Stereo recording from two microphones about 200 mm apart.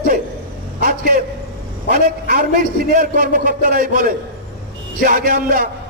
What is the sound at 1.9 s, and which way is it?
Speech, 45° right (ahead or behind).